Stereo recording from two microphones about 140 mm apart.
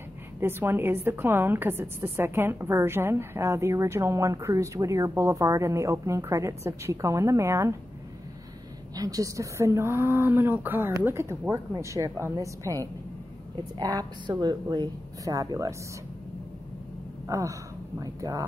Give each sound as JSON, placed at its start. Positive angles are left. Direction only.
{"t": 0.4, "sound": "a woman's voice", "side_deg": -15}
{"t": 8.9, "sound": "a woman's voice", "side_deg": -25}
{"t": 17.3, "sound": "speech", "side_deg": -20}